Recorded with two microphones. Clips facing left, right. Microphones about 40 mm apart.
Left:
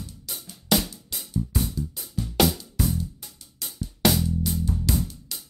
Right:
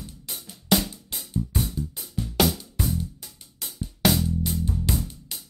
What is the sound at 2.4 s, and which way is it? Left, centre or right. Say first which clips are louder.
Music: left 1 dB; centre.